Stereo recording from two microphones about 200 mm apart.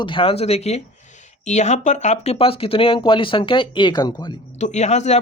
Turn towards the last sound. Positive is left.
turn(degrees=35)  # may be behind; listen again after turning